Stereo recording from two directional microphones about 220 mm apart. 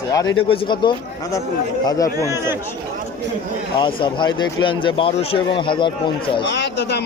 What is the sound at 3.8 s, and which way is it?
Speech, 20° left (ahead or behind).